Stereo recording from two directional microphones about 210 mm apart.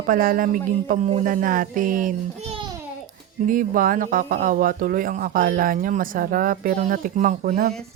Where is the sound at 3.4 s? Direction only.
40° right (ahead or behind).